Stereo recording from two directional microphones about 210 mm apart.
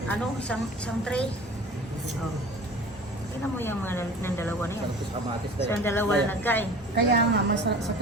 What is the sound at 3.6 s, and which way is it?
Speech, 10° left (ahead or behind).